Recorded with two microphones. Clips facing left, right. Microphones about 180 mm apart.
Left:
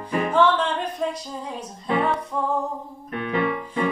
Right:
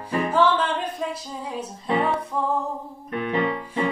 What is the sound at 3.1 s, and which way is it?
Piano, 30° right (ahead or behind).